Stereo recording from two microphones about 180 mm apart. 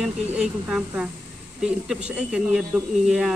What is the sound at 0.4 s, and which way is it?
A man's voice, 5° right (ahead or behind).